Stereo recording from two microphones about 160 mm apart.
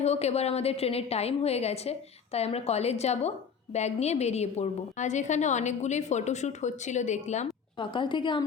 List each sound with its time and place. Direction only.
0.0 s a woman's voice: 40° left (ahead or behind)
7.8 s a woman's voice: 30° left (ahead or behind)